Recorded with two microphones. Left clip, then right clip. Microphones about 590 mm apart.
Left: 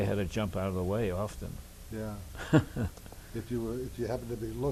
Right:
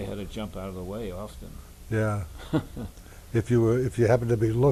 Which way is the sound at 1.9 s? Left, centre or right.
Right.